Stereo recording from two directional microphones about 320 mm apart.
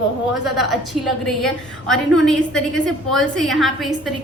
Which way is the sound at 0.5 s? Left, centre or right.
Centre.